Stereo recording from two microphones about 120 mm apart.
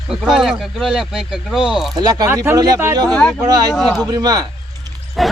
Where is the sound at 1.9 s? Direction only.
30° right (ahead or behind).